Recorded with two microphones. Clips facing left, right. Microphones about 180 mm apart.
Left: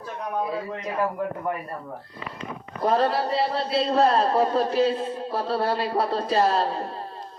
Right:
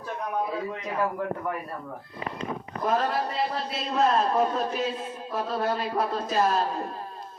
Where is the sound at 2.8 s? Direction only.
35° left (ahead or behind).